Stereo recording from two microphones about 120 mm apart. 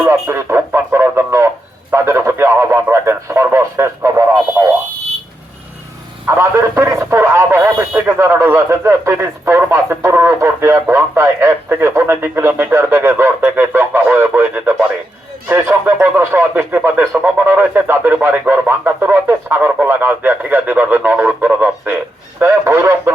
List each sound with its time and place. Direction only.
0.0 s radio: 20° right (ahead or behind)
1.9 s speech: 20° right (ahead or behind)
6.2 s speech: 20° right (ahead or behind)